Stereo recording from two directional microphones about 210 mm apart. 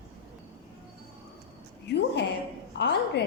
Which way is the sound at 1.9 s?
55° left (ahead or behind).